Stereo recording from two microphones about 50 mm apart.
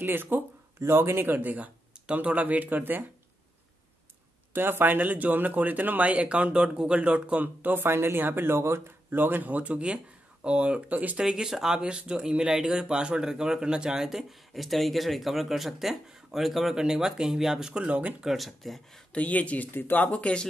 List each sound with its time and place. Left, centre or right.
0.0 s speech: right
4.6 s speech: right
7.4 s speech: right
9.1 s speech: right
10.9 s speech: right
11.1 s speech: centre
17.7 s speech: right
18.2 s speech: centre
19.1 s speech: left
19.7 s speech: left
20.1 s speech: left